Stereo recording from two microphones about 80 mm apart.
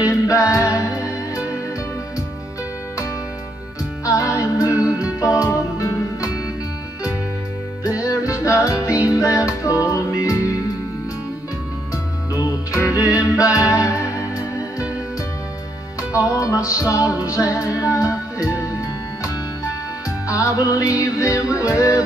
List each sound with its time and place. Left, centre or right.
0.3 s music: left
4.0 s music: left
8.0 s music: left
12.4 s music: left
13.6 s music: centre
13.8 s music: left
16.0 s music: centre
16.3 s music: left